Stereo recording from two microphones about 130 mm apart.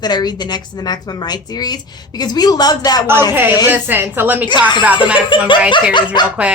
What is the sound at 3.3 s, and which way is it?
A woman's voice, 15° right (ahead or behind).